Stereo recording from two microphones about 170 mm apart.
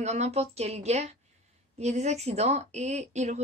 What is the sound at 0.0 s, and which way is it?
A woman's voice, 40° right (ahead or behind).